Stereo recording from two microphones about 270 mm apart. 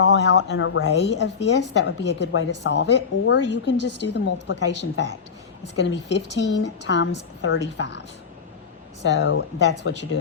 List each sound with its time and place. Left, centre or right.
0.0 s a woman's voice: left